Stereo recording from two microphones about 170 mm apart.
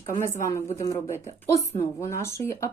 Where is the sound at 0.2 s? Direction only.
15° left (ahead or behind).